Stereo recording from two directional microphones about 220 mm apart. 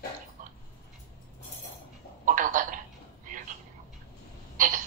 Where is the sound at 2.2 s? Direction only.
35° right (ahead or behind).